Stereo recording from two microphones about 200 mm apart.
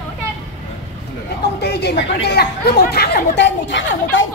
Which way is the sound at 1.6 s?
55° left (ahead or behind).